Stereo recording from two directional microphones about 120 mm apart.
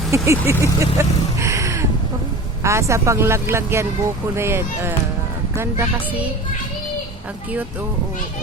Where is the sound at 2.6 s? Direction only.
25° right (ahead or behind).